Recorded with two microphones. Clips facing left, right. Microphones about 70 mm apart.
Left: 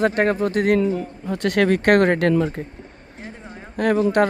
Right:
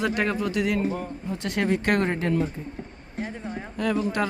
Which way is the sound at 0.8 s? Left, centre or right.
Left.